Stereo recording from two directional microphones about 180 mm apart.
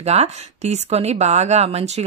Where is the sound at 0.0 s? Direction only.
35° right (ahead or behind).